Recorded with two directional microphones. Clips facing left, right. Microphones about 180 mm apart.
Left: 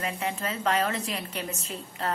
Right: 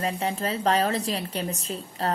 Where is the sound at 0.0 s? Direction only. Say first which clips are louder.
Right 4 dB; 35° right (ahead or behind).